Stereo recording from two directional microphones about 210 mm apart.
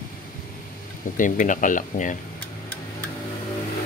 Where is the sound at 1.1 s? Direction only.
40° left (ahead or behind).